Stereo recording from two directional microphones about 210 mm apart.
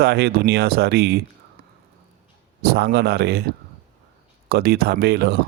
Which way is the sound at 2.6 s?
50° right (ahead or behind).